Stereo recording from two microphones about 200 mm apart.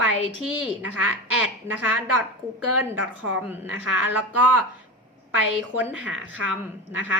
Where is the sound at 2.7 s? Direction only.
90° right.